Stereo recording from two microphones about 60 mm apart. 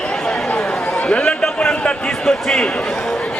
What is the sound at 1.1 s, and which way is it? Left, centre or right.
A man's voice, centre.